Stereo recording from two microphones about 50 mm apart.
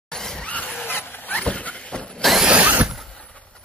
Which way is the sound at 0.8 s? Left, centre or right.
Left.